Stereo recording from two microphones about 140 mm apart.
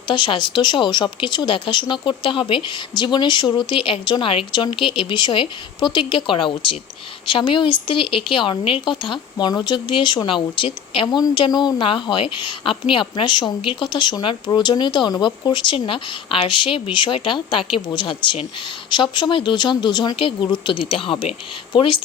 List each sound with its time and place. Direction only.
0.1 s speech: 35° left (ahead or behind)